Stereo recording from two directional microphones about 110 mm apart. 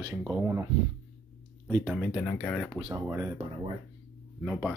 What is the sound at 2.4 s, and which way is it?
Speech, 10° left (ahead or behind).